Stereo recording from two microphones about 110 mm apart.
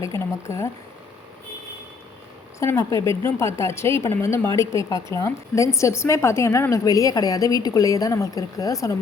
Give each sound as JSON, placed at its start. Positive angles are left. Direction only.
{"t": 0.0, "sound": "a woman's voice", "side_deg": 25}
{"t": 2.6, "sound": "a woman's voice", "side_deg": 30}